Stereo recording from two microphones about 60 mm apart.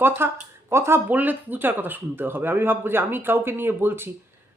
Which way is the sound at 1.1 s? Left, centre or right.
Right.